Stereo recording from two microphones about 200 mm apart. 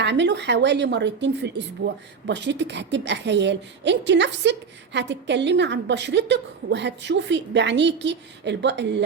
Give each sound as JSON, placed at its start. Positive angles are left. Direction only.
{"t": 0.0, "sound": "a woman's voice", "side_deg": -60}